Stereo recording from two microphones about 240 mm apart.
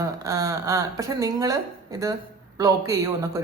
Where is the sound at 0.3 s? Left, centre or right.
Centre.